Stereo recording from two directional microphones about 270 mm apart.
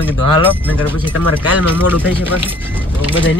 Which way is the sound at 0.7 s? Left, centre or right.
Centre.